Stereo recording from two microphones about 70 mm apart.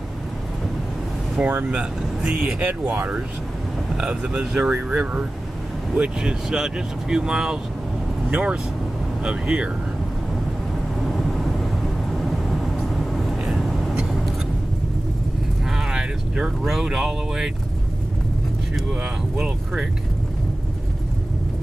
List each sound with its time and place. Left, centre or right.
1.4 s speech: centre
2.8 s speech: right
3.9 s speech: centre
11.1 s vehicle: centre
13.1 s vehicle: centre
15.9 s speech: centre
19.3 s speech: centre